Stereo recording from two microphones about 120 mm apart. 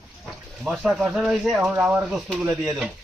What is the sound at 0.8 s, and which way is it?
Speech, 5° right (ahead or behind).